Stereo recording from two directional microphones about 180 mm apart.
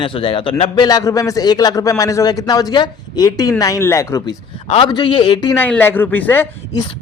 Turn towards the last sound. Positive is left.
turn(degrees=15)  # may be behind; listen again after turning